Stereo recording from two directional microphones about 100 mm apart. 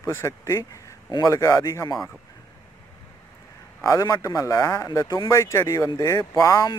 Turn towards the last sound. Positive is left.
turn(degrees=35)  # may be behind; listen again after turning